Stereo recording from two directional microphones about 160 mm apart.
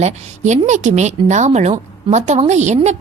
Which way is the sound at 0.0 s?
45° right (ahead or behind).